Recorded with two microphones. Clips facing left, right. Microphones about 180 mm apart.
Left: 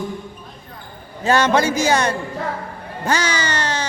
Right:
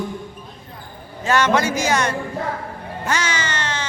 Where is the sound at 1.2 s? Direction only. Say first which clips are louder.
Left 2 dB; 30° left (ahead or behind).